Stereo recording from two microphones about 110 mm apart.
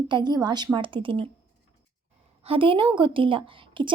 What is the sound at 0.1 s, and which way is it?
A woman's voice, 40° right (ahead or behind).